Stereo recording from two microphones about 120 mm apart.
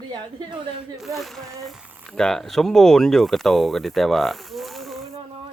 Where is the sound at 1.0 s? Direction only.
Centre (ahead or behind).